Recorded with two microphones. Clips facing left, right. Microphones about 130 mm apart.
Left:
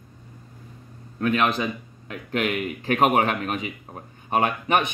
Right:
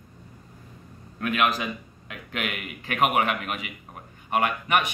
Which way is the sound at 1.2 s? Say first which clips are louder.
Left 3 dB; 30° left (ahead or behind).